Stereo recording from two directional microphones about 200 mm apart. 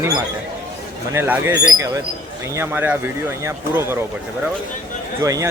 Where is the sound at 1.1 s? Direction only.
15° right (ahead or behind).